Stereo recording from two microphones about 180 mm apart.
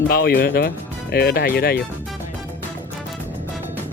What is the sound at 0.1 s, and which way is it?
Speech, 60° left (ahead or behind).